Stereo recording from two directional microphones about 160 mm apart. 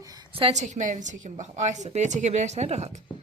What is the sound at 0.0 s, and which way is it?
A woman's voice, 25° right (ahead or behind).